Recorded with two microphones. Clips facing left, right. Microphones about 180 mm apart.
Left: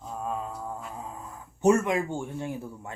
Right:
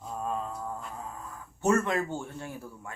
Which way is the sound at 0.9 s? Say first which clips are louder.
Left 1 dB; 20° left (ahead or behind).